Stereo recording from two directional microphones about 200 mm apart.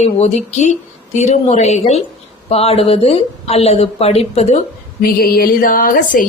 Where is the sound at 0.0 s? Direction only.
35° left (ahead or behind).